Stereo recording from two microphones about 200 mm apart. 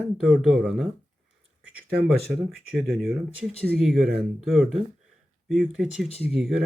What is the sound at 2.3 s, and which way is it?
Speech, centre (ahead or behind).